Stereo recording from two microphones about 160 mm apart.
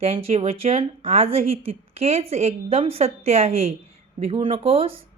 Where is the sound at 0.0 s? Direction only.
40° right (ahead or behind).